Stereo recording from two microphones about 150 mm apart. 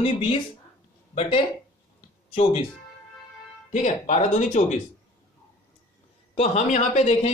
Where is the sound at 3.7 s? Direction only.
55° left (ahead or behind).